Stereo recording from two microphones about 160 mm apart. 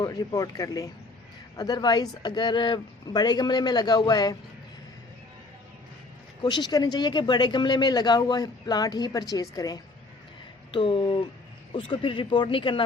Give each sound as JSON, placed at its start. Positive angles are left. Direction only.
{"t": 0.0, "sound": "speech", "side_deg": 25}
{"t": 6.4, "sound": "speech", "side_deg": 25}